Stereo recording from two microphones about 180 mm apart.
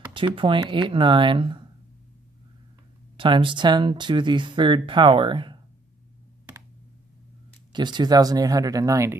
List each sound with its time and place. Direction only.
0.1 s speech: 30° right (ahead or behind)
3.2 s speech: 30° right (ahead or behind)
7.7 s speech: 25° right (ahead or behind)